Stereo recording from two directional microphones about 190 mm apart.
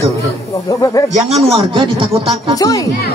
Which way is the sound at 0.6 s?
20° left (ahead or behind).